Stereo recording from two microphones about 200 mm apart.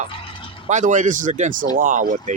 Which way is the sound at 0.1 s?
25° left (ahead or behind).